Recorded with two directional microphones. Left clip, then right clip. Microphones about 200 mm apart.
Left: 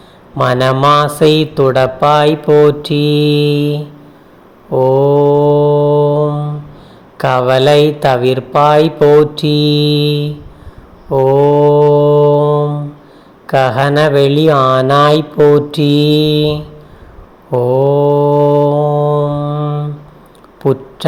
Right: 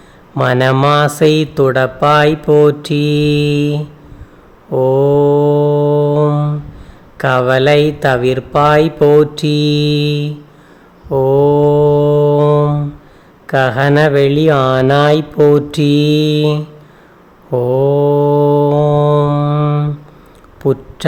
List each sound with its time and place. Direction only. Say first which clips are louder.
0.3 s speech: left 1 dB; 10° right (ahead or behind)
4.7 s mantra: left 1 dB; 10° right (ahead or behind)
6.2 s a sound: right 2 dB; 30° right (ahead or behind)
7.2 s speech: left 1 dB; 15° right (ahead or behind)
11.1 s mantra: left 2 dB; 10° right (ahead or behind)
12.4 s mantra: right 1 dB; 30° right (ahead or behind)
13.5 s speech: left 1 dB; 10° right (ahead or behind)
17.5 s mantra: left 2 dB; 15° right (ahead or behind)
18.8 s mantra: right 1 dB; 25° right (ahead or behind)
20.6 s speech: left 1 dB; 10° right (ahead or behind)